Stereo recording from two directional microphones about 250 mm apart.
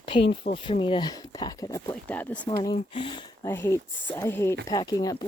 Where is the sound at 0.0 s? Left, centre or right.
Left.